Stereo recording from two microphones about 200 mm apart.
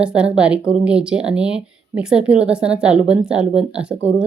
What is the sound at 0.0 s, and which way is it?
A woman's voice, 5° right (ahead or behind).